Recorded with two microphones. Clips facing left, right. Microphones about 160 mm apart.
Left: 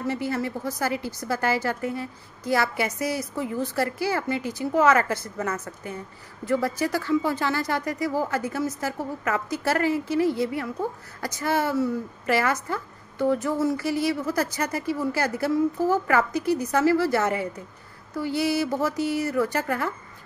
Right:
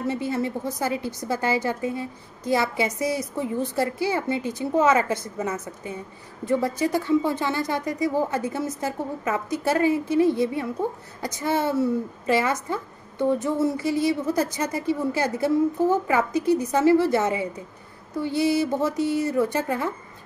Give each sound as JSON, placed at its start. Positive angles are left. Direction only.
{"t": 0.0, "sound": "a woman's voice", "side_deg": -20}